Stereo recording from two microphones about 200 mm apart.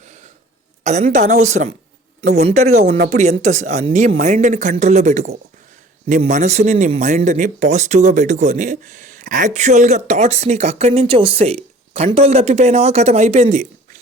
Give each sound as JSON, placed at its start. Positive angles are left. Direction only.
{"t": 0.0, "sound": "throat clearing", "side_deg": -35}
{"t": 0.9, "sound": "speech", "side_deg": -35}